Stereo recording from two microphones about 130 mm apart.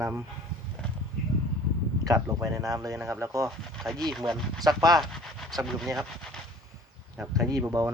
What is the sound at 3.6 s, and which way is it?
Speech, centre (ahead or behind).